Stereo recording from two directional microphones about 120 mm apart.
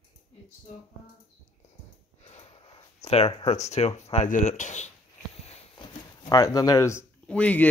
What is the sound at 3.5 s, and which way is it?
Speech, 65° left (ahead or behind).